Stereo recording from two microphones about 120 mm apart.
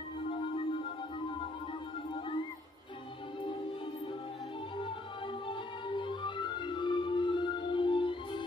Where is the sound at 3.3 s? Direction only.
45° left (ahead or behind).